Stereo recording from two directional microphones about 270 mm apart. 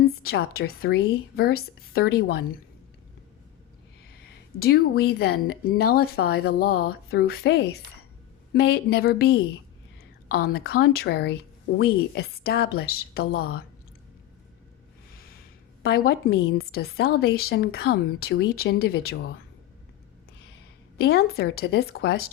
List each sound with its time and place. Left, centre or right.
0.0 s a woman's voice: left
4.6 s a woman's voice: left
15.8 s a woman's voice: left
21.0 s a woman's voice: left